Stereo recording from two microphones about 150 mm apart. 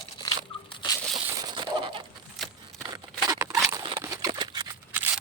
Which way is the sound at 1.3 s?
25° right (ahead or behind).